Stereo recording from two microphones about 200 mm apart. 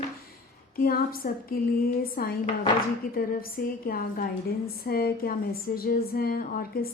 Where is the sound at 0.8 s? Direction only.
45° left (ahead or behind).